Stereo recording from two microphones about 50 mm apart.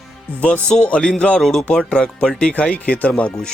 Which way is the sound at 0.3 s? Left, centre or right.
Left.